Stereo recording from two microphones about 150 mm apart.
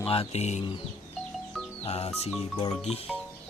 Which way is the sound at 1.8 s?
45° left (ahead or behind).